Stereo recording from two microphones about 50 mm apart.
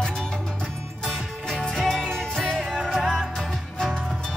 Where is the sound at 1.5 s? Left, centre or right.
Centre.